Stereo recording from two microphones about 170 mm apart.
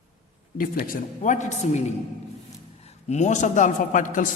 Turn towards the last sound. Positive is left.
turn(degrees=50)  # may be behind; listen again after turning